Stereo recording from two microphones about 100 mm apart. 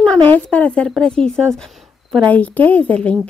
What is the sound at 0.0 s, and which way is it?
A woman's voice, 15° left (ahead or behind).